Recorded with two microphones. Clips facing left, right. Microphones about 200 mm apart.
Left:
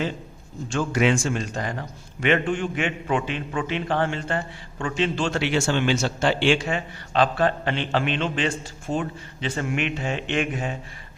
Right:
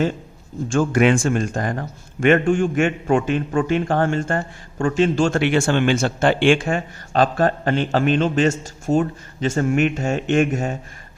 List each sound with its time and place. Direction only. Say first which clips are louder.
0.7 s a man's voice: right 5 dB; 50° right (ahead or behind)